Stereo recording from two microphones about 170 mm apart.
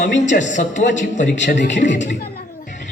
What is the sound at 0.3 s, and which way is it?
A man's voice, 45° left (ahead or behind).